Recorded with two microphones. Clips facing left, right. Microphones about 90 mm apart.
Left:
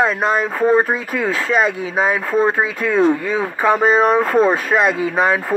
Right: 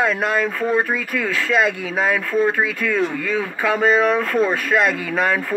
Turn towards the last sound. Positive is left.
turn(degrees=20)  # may be behind; listen again after turning